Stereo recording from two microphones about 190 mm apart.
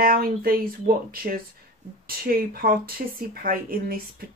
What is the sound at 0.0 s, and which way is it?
A woman's voice, 50° right (ahead or behind).